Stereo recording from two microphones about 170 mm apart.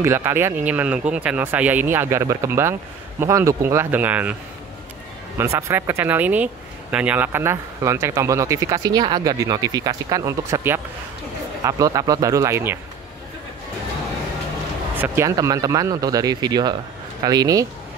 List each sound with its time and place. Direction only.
0.0 s speech: 15° right (ahead or behind)
5.4 s speech: 15° right (ahead or behind)
15.0 s speech: 15° right (ahead or behind)